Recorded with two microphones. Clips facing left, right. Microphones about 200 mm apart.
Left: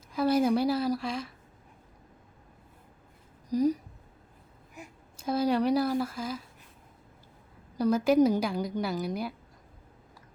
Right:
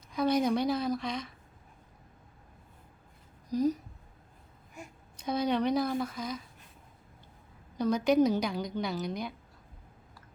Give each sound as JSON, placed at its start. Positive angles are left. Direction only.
{"t": 0.1, "sound": "a woman's voice", "side_deg": 5}
{"t": 3.5, "sound": "speech", "side_deg": 10}
{"t": 7.8, "sound": "a woman's voice", "side_deg": 5}